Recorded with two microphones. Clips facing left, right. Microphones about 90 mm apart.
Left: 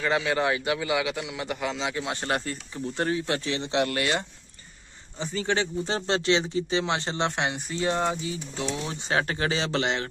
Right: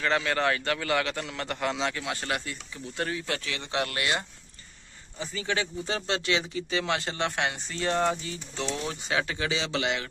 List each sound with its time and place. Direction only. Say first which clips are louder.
0.0 s a man's voice: left 1 dB; 15° left (ahead or behind)
2.0 s speech: left 3 dB; 25° left (ahead or behind)
5.2 s speech: left 4 dB; 30° left (ahead or behind); by 8.7 s 15° left (ahead or behind)
9.2 s speech: left 3 dB; 40° left (ahead or behind)